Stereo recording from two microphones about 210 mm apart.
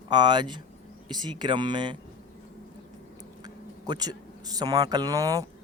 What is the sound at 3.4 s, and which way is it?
Speech, 20° right (ahead or behind).